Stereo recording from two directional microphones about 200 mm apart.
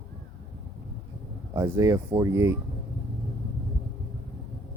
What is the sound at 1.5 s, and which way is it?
Speech, 15° right (ahead or behind).